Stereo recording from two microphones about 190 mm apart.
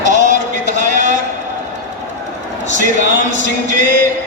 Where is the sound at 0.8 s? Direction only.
40° right (ahead or behind).